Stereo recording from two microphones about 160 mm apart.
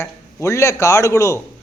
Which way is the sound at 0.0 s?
20° left (ahead or behind).